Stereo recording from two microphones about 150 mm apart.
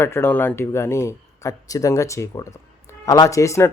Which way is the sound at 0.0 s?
15° left (ahead or behind).